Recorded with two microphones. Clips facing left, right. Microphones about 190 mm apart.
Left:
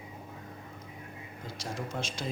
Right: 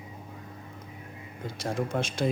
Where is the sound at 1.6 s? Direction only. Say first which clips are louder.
Right 7 dB; 55° right (ahead or behind).